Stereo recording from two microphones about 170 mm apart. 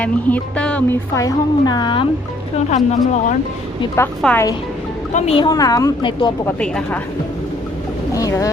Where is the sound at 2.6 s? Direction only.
45° left (ahead or behind).